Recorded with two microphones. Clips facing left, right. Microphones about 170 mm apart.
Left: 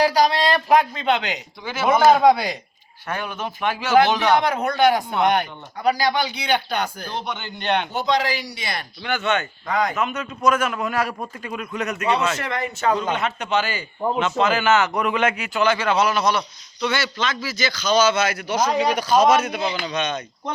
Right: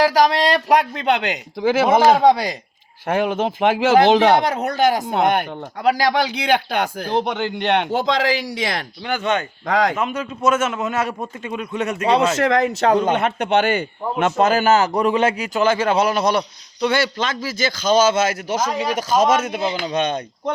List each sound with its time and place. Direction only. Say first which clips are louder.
0.4 s a man's voice: right 1 dB; 75° right (ahead or behind); by 1.9 s 90° right
2.3 s a man's voice: right 1 dB; 40° right (ahead or behind)
3.1 s speech: right 9 dB; 90° right
4.4 s a man's voice: right 1 dB; 40° right (ahead or behind)
5.5 s speech: right 3 dB; 90° right
9.0 s a man's voice: right 1 dB; 35° right (ahead or behind)
9.6 s speech: right 5 dB; 90° right
10.0 s a man's voice: right 1 dB; 30° right (ahead or behind)
12.4 s speech: right 9 dB; 90° right
12.9 s a man's voice: right 2 dB; 55° right (ahead or behind)
17.4 s a man's voice: right 3 dB; 50° right (ahead or behind)